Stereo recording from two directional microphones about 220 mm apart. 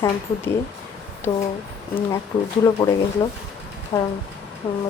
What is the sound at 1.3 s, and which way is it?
Speech, 30° left (ahead or behind).